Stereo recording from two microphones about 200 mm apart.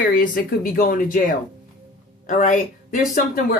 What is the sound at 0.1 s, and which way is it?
Speech, 45° left (ahead or behind).